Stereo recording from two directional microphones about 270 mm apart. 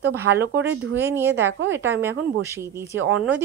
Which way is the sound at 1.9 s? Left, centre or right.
Centre.